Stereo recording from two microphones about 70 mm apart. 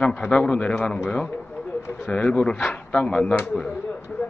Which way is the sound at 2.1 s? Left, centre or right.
Centre.